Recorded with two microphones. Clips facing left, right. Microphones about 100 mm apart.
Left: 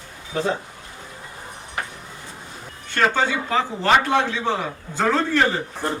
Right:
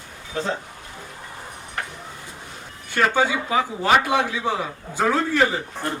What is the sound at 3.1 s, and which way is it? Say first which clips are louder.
A man's voice: right 1 dB; 10° right (ahead or behind).